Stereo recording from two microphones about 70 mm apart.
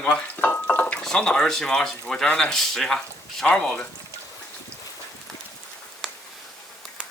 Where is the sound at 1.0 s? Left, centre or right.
Centre.